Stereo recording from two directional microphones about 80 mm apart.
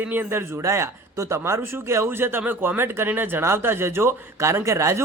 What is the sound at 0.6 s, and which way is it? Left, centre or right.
Speech, right.